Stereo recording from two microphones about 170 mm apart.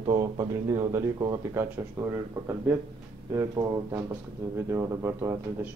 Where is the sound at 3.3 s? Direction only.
20° right (ahead or behind).